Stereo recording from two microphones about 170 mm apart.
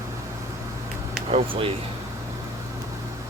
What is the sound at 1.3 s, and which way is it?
Speech, 35° right (ahead or behind).